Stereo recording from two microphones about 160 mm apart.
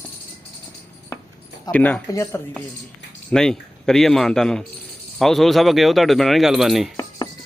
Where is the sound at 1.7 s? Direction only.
10° left (ahead or behind).